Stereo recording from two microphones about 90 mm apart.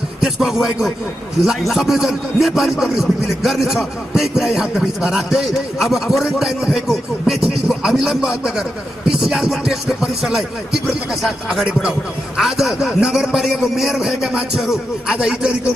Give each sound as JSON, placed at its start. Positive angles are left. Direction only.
{"t": 0.2, "sound": "speech", "side_deg": -5}